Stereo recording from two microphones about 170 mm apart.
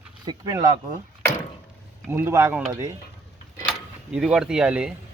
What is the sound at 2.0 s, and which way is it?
Speech, 15° right (ahead or behind).